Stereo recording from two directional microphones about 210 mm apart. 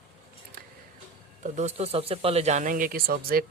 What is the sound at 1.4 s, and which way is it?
Speech, 35° right (ahead or behind).